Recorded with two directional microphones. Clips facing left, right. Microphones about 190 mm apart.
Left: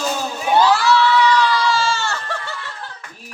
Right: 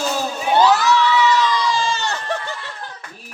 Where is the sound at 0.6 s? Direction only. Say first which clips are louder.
Even; 20° right (ahead or behind).